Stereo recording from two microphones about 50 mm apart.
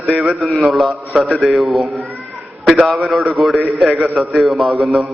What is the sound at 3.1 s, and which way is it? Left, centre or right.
A man's voice, centre.